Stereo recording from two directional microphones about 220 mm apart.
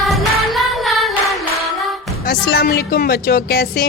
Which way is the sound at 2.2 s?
45° left (ahead or behind).